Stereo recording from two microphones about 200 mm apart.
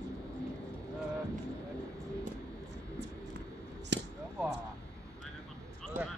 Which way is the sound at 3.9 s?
60° right (ahead or behind).